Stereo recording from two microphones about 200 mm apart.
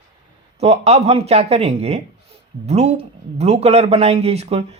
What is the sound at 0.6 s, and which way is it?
Speech, 30° right (ahead or behind).